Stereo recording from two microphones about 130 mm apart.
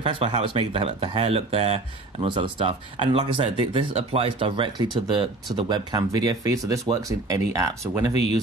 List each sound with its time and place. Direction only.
0.0 s speech: 45° right (ahead or behind); by 7.4 s 25° right (ahead or behind)
8.1 s speech: 55° left (ahead or behind)